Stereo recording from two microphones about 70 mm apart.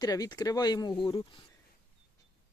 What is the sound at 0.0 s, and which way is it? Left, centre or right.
Speech, left.